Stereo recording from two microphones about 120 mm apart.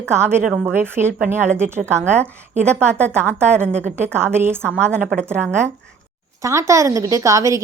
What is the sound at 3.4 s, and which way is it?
A woman's voice, 20° right (ahead or behind).